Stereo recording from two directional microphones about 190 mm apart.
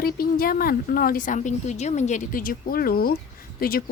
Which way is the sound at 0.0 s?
50° left (ahead or behind).